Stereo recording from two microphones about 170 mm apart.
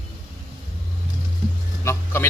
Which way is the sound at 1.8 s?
15° left (ahead or behind).